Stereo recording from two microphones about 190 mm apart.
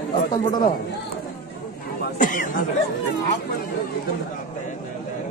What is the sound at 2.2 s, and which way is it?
Speech, 45° left (ahead or behind).